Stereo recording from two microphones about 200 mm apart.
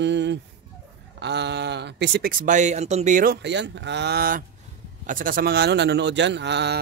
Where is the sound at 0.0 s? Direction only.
60° right (ahead or behind).